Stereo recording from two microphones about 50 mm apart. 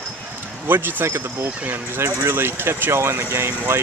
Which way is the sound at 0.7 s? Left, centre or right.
Right.